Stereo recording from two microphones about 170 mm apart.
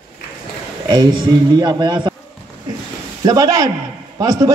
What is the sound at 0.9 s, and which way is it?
A man's voice, 25° right (ahead or behind).